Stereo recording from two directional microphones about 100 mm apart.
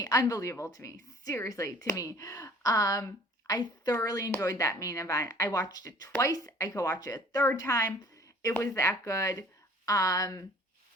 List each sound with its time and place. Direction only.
0.0 s speech: 35° left (ahead or behind)